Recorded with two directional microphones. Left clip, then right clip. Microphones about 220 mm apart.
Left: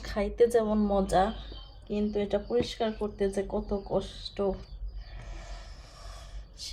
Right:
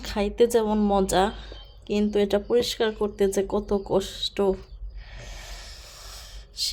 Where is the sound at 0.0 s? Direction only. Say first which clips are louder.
Right 3 dB; 25° right (ahead or behind).